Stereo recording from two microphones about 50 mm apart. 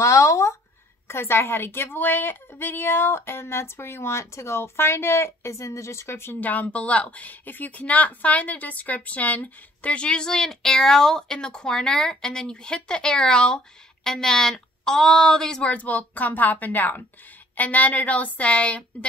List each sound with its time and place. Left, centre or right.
0.0 s a sound: left
1.0 s a woman's voice: left
5.5 s a woman's voice: left
6.4 s a woman's voice: left; by 15.6 s centre
15.6 s a woman's voice: left